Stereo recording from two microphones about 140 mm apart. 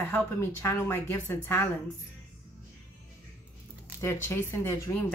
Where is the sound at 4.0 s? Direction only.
20° left (ahead or behind).